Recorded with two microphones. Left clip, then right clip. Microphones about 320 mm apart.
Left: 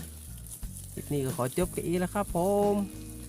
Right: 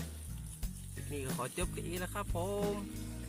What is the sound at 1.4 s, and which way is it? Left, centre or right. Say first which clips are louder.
Speech: left 9 dB; right.